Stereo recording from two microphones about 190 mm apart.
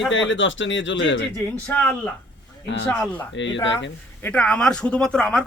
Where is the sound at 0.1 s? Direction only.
80° left.